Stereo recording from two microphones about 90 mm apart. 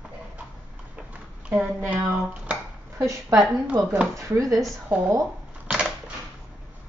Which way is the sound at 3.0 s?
35° right (ahead or behind).